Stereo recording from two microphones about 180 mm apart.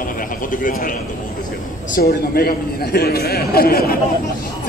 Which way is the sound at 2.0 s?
55° left (ahead or behind).